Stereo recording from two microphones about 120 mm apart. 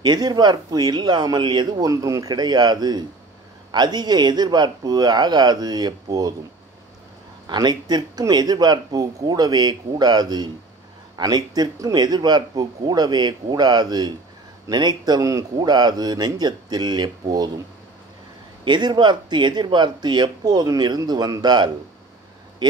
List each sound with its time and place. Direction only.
0.0 s speech: 35° right (ahead or behind)
7.4 s speech: 35° right (ahead or behind)
18.6 s speech: 40° right (ahead or behind)